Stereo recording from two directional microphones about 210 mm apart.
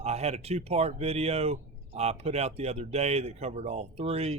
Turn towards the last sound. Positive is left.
turn(degrees=-30)  # may be behind; listen again after turning